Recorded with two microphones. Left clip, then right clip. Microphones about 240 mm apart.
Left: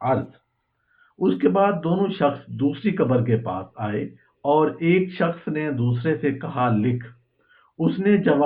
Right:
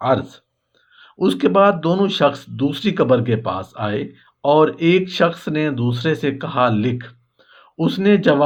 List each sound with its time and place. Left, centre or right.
1.2 s speech: right